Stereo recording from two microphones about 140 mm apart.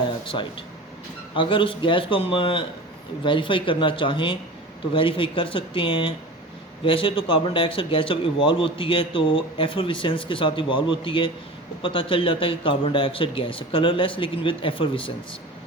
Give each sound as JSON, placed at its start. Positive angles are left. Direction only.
{"t": 0.3, "sound": "a man's voice", "side_deg": 40}